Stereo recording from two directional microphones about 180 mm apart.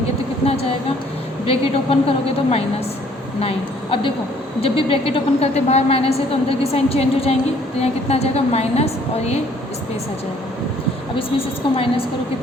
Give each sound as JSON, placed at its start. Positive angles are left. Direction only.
{"t": 1.5, "sound": "a woman's voice", "side_deg": 30}
{"t": 4.6, "sound": "a woman's voice", "side_deg": 30}
{"t": 11.2, "sound": "a woman's voice", "side_deg": 30}